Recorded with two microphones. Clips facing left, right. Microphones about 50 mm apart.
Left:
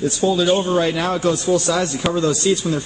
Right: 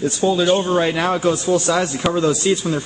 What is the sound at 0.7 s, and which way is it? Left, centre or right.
A man's voice, right.